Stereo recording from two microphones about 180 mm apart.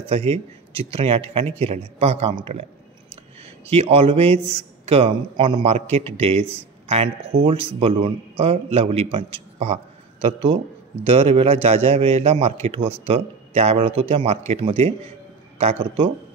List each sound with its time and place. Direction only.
0.0 s a man's voice: 30° right (ahead or behind)
3.7 s a man's voice: 35° right (ahead or behind)